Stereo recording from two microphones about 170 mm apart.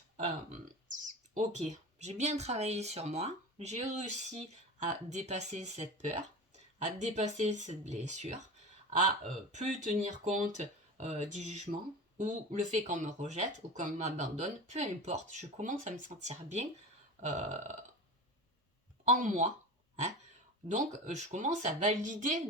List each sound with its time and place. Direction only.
0.5 s speech: 50° right (ahead or behind)
17.2 s burping: 40° right (ahead or behind)
19.0 s speech: 50° right (ahead or behind)
20.7 s speech: 45° right (ahead or behind)